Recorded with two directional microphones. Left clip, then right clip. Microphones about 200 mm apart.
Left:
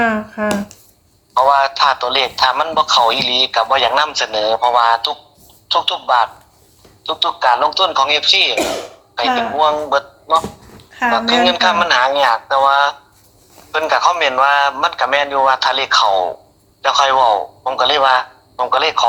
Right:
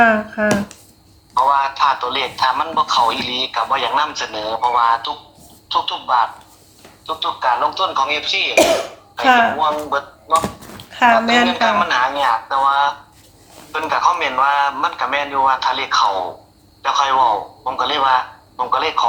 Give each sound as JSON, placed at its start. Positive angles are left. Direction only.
{"t": 0.0, "sound": "speech", "side_deg": 10}
{"t": 1.3, "sound": "speech", "side_deg": 50}
{"t": 10.9, "sound": "a sound", "side_deg": -20}
{"t": 11.4, "sound": "speech", "side_deg": 50}